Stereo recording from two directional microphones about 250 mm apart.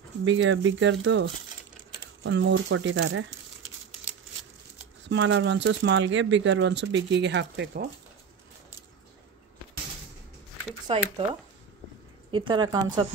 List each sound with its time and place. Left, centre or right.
0.2 s speech: right
5.1 s speech: right
10.9 s speech: right
12.3 s speech: centre